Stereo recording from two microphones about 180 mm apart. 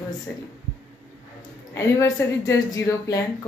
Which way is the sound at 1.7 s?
15° left (ahead or behind).